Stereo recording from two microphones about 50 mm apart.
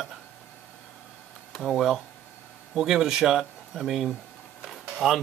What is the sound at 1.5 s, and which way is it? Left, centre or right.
Speech, centre.